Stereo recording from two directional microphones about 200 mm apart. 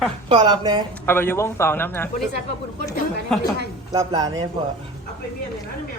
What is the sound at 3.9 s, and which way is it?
Speech, 20° right (ahead or behind).